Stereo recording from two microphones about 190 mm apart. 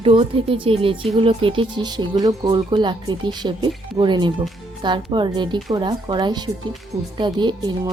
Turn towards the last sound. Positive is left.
turn(degrees=-20)  # may be behind; listen again after turning